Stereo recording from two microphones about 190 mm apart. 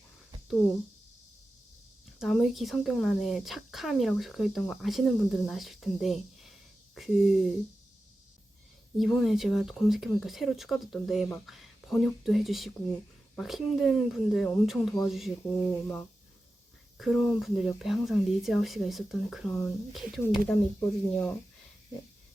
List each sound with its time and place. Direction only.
2.1 s a woman's voice: centre (ahead or behind)
9.0 s a woman's voice: centre (ahead or behind)
15.7 s speech: 10° left (ahead or behind)
17.0 s a woman's voice: centre (ahead or behind)